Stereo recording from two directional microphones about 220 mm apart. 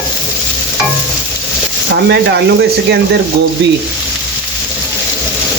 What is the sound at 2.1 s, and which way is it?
Speech, 50° right (ahead or behind).